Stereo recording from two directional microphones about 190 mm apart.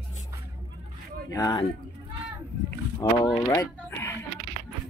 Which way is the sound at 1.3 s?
20° left (ahead or behind).